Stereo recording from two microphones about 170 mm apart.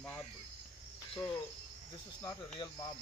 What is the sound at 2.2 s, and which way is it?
Speech, 20° left (ahead or behind).